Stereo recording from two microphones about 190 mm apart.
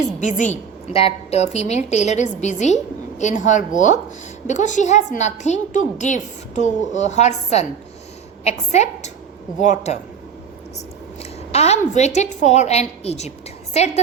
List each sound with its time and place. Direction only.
0.0 s a woman's voice: 40° left (ahead or behind)
11.2 s a woman's voice: 35° left (ahead or behind)